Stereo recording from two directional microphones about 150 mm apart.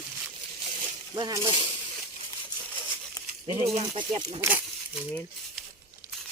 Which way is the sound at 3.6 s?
40° right (ahead or behind).